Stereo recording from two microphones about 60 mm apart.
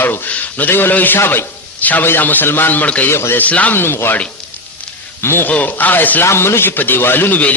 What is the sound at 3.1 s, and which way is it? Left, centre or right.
Speech, left.